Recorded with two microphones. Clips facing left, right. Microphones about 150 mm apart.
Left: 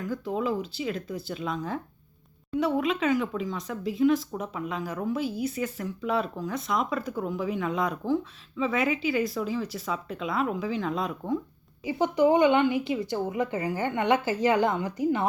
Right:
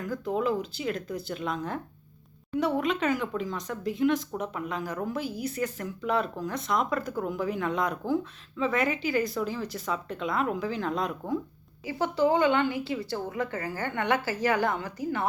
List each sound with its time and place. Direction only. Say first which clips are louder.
0.1 s speech: right 1 dB; centre (ahead or behind)
11.9 s speech: left 3 dB; 20° left (ahead or behind)